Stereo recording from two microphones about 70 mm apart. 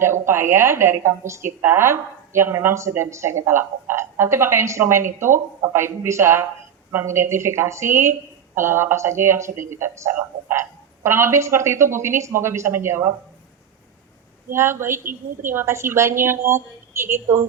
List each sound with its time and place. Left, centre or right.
0.0 s a woman's voice: right
14.5 s a woman's voice: right